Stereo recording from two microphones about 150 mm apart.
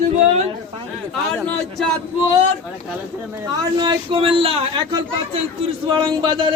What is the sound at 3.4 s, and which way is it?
Speech, 30° right (ahead or behind).